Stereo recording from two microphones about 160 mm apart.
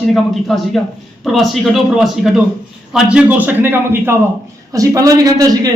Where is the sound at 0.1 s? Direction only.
Centre (ahead or behind).